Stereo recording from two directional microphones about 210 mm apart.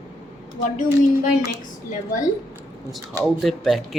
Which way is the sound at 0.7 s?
40° left (ahead or behind).